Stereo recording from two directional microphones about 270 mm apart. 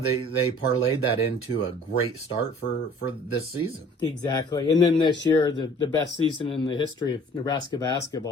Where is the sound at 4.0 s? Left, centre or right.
Centre.